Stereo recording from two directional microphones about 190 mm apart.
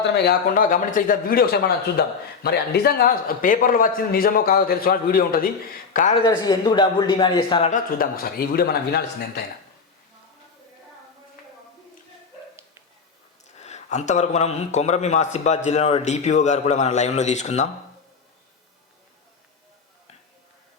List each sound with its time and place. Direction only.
0.0 s speech: 60° left (ahead or behind); by 6.1 s 45° left (ahead or behind)
6.2 s a man's voice: 20° left (ahead or behind)
7.7 s speech: 50° left (ahead or behind)
13.6 s a man's voice: 35° left (ahead or behind)